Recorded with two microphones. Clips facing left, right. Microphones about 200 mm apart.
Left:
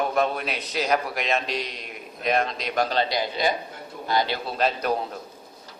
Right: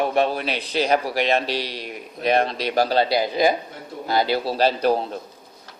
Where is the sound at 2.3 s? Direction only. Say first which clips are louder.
Right 4 dB; 30° right (ahead or behind).